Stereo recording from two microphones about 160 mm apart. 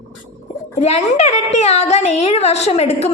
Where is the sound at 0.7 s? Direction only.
45° left (ahead or behind).